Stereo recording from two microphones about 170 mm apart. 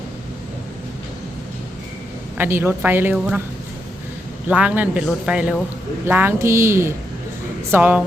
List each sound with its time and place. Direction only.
2.4 s a man's voice: 15° right (ahead or behind)
4.4 s a man's voice: 10° right (ahead or behind)